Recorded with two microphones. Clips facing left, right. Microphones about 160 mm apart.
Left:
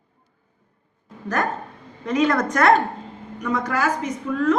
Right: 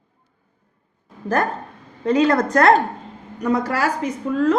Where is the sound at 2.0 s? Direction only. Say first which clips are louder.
Right 3 dB; 30° right (ahead or behind).